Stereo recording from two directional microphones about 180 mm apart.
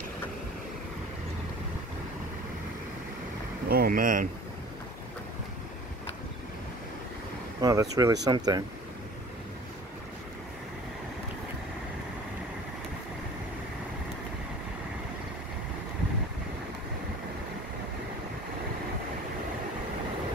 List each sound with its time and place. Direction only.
3.6 s speech: 55° right (ahead or behind)
7.6 s speech: 20° right (ahead or behind)